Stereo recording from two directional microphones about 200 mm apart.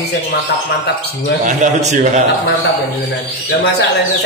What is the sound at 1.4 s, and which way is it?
Speech, 35° right (ahead or behind).